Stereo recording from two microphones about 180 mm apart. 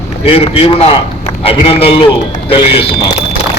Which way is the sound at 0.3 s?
30° left (ahead or behind).